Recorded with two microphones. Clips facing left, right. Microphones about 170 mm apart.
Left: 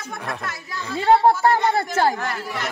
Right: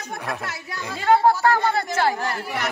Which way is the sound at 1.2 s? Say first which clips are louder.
Left 1 dB; 25° left (ahead or behind).